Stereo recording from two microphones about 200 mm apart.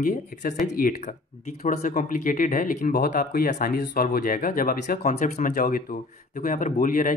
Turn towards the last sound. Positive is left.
turn(degrees=40)  # may be behind; listen again after turning